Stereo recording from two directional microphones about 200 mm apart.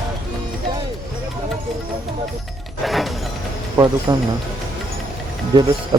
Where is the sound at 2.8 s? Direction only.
Centre (ahead or behind).